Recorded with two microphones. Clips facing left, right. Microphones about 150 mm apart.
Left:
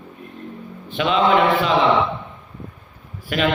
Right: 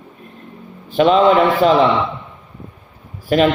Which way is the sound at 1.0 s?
40° right (ahead or behind).